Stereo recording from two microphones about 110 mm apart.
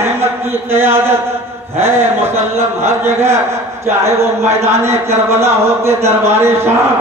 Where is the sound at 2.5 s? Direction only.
20° right (ahead or behind).